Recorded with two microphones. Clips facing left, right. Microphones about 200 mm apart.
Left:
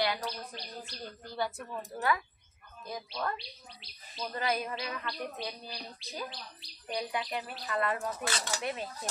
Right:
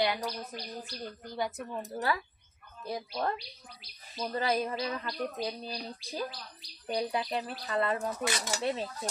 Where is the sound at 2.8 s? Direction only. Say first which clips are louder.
Right 3 dB; 30° right (ahead or behind).